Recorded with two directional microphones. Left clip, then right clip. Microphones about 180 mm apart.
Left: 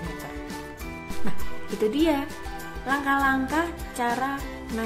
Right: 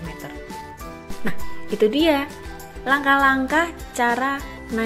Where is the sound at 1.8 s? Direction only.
30° right (ahead or behind).